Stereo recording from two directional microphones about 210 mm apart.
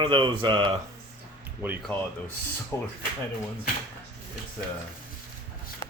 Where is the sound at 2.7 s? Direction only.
10° left (ahead or behind).